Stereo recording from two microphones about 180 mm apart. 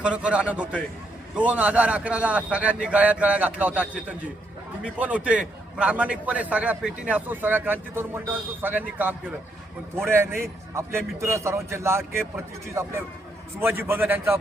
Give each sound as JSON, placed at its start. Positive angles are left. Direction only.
{"t": 0.0, "sound": "a man's voice", "side_deg": -5}
{"t": 4.9, "sound": "a man's voice", "side_deg": -10}